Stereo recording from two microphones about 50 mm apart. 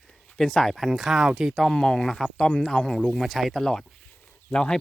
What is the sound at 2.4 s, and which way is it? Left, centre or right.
Speech, left.